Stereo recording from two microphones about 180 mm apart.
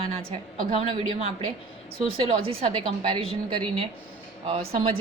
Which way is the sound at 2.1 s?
30° right (ahead or behind).